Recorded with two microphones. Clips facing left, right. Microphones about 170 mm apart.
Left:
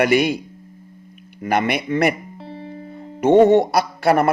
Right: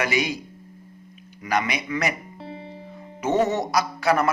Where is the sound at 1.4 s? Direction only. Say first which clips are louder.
Left 5 dB; 55° left (ahead or behind).